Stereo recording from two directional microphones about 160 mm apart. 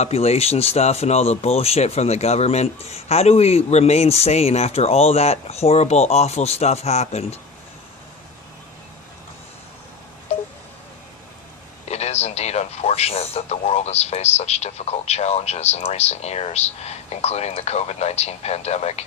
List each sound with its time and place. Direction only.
0.0 s speech: 40° left (ahead or behind)
11.9 s a man's voice: 40° left (ahead or behind)